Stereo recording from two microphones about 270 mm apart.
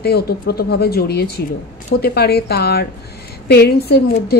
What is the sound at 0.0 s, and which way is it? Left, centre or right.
A woman's voice, left.